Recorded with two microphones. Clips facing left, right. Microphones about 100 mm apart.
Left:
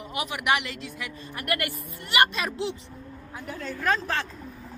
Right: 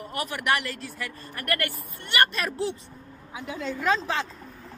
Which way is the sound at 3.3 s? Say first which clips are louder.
Right 3 dB; 10° right (ahead or behind).